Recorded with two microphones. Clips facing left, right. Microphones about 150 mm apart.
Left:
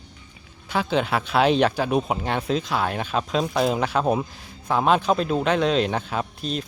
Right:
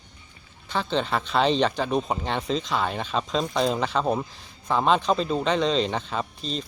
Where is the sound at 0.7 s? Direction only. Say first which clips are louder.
Left 3 dB; 10° left (ahead or behind).